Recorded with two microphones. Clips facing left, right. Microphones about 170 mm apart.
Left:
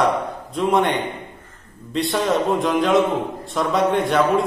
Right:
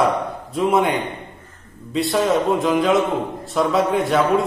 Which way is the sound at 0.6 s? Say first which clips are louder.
Right 1 dB; 5° right (ahead or behind).